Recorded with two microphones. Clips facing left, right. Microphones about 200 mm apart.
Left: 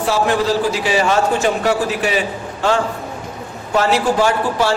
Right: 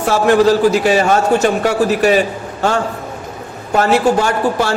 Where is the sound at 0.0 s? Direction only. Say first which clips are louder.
Right 6 dB; 50° right (ahead or behind).